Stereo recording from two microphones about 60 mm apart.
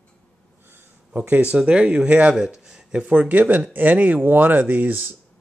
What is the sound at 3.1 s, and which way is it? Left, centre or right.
Speech, right.